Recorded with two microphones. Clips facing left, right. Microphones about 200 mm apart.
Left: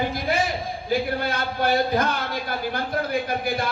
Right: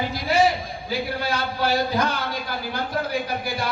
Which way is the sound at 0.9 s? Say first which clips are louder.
Left 2 dB; 55° left (ahead or behind).